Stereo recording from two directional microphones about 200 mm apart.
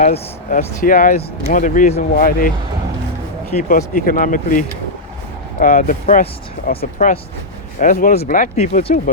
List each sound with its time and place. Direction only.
0.0 s speech: 40° left (ahead or behind)
3.5 s speech: 40° left (ahead or behind)